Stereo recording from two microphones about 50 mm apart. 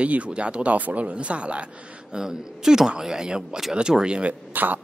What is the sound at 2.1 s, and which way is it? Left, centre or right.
Speech, centre.